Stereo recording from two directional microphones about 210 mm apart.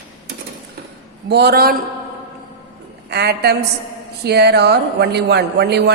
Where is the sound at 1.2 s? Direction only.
50° right (ahead or behind).